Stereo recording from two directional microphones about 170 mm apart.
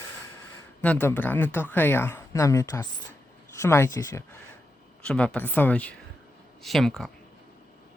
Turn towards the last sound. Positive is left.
turn(degrees=0)  # may be behind; listen again after turning